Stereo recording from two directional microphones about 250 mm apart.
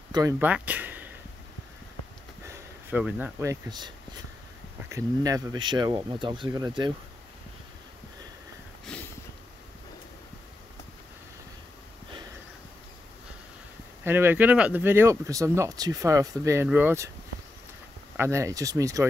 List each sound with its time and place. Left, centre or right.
0.1 s speech: centre
2.4 s speech: centre
8.8 s a sound: centre
14.0 s speech: centre
18.1 s speech: centre